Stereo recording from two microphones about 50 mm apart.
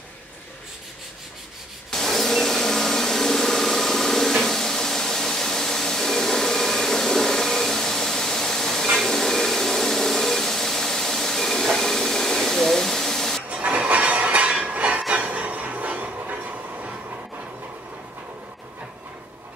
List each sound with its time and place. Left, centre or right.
1.9 s vacuum cleaner: centre
8.9 s a sound: centre
13.5 s vehicle: right
14.6 s train: right